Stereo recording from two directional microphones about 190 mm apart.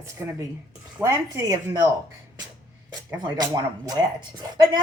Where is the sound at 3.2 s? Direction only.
20° right (ahead or behind).